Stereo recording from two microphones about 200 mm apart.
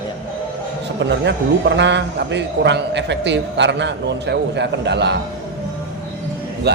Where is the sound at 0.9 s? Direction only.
60° right (ahead or behind).